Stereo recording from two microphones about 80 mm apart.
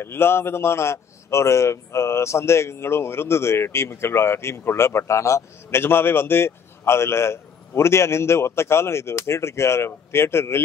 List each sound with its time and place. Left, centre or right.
0.0 s a man's voice: left